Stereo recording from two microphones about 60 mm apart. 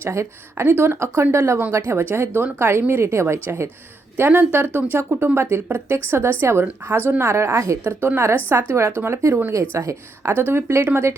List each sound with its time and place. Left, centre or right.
0.0 s a woman's voice: right
0.6 s a woman's voice: right
4.9 s a woman's voice: right
9.5 s a woman's voice: right
10.2 s speech: right